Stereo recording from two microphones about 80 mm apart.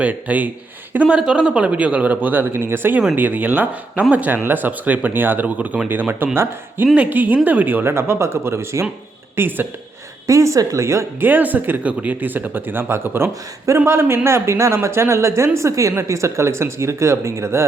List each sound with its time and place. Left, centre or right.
0.0 s a man's voice: centre
10.2 s speech: right
11.2 s speech: right